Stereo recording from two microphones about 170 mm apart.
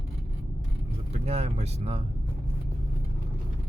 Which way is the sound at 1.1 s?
35° right (ahead or behind).